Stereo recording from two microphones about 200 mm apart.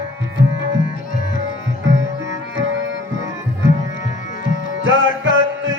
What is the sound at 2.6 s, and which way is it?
Music, 70° right (ahead or behind).